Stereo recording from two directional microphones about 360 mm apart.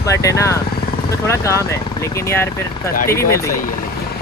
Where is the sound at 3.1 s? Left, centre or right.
Centre.